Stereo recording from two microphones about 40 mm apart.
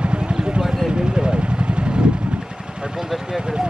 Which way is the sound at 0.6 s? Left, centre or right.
Centre.